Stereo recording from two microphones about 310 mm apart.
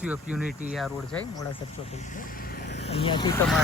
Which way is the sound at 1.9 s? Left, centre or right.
Left.